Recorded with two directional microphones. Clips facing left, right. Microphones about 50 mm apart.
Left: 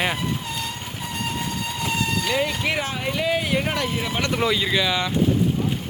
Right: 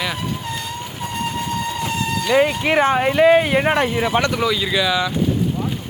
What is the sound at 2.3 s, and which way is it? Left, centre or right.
Speech, right.